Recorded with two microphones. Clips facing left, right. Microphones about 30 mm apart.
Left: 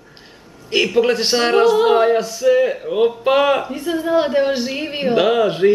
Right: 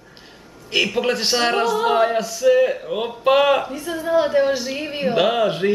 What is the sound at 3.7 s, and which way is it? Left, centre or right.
A woman's voice, left.